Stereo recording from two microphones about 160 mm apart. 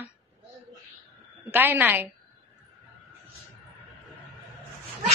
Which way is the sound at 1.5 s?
10° right (ahead or behind).